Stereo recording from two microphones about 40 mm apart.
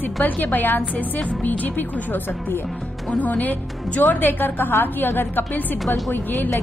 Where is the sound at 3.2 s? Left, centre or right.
Left.